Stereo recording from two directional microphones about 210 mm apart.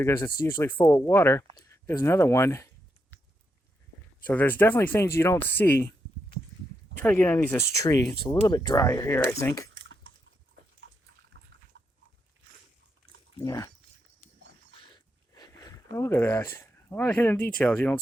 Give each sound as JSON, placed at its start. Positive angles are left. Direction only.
{"t": 0.0, "sound": "speech", "side_deg": 15}
{"t": 4.2, "sound": "speech", "side_deg": 10}
{"t": 7.0, "sound": "speech", "side_deg": 5}
{"t": 9.7, "sound": "typing", "side_deg": -60}
{"t": 11.7, "sound": "livestock", "side_deg": -65}
{"t": 13.4, "sound": "speech", "side_deg": 15}
{"t": 14.8, "sound": "a sound", "side_deg": 20}